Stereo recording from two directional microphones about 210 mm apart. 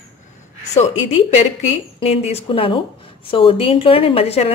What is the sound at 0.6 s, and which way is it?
A woman's voice, 35° left (ahead or behind).